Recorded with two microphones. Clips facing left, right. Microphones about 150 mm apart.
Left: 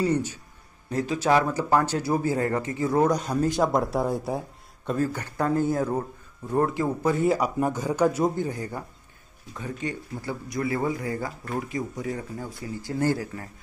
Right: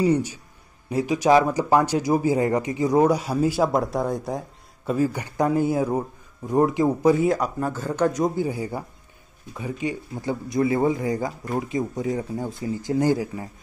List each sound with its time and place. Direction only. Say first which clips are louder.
0.0 s speech: right 4 dB; 10° right (ahead or behind); by 4.5 s 5° left (ahead or behind)
4.8 s speech: right 3 dB; 10° right (ahead or behind)
7.2 s speech: even; 10° left (ahead or behind)
8.4 s speech: right 4 dB; 10° right (ahead or behind)